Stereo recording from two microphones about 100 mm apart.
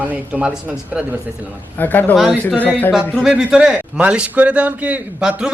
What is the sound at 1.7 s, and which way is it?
Speech, 20° left (ahead or behind).